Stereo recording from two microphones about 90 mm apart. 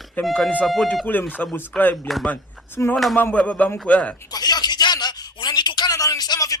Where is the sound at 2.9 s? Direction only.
Centre (ahead or behind).